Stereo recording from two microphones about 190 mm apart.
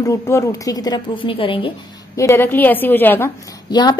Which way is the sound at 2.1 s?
15° left (ahead or behind).